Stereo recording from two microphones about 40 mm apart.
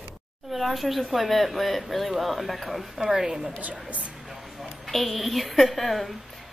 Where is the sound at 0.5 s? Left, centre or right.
Centre.